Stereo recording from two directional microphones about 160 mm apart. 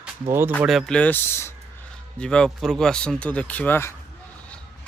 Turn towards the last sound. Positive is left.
turn(degrees=10)  # may be behind; listen again after turning